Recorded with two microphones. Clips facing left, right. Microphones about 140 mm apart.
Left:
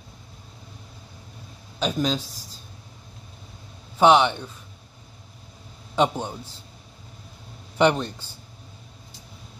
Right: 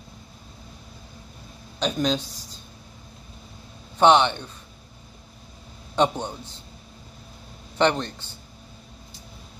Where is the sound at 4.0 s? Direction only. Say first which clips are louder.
Even; 5° left (ahead or behind).